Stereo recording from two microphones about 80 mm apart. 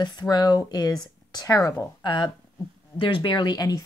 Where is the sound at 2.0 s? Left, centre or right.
Left.